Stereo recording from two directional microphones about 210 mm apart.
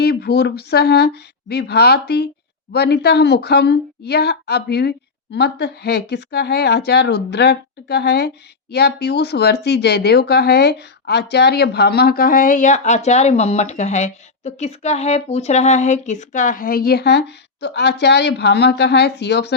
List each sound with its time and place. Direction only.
0.0 s speech: 50° left (ahead or behind)